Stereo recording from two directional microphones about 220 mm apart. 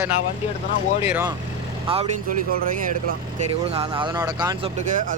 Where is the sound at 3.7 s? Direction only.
25° right (ahead or behind).